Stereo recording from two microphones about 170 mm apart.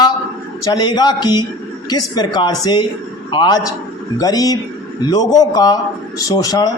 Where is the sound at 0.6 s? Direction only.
25° left (ahead or behind).